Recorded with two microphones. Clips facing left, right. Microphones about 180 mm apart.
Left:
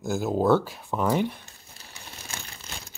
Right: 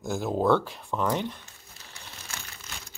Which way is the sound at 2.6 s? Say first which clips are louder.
Left 3 dB; 30° left (ahead or behind).